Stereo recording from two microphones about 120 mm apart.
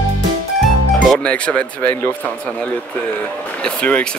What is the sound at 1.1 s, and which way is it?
Speech, 10° left (ahead or behind).